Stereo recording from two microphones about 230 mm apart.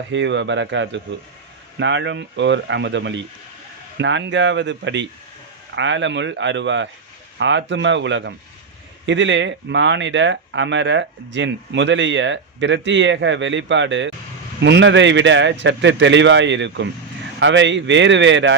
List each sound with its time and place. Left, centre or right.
0.1 s speech: right